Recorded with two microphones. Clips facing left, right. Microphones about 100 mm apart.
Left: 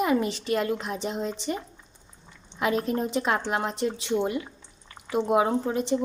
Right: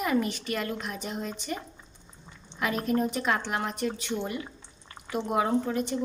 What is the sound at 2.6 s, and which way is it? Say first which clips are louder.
Speech: left 2 dB; 25° left (ahead or behind).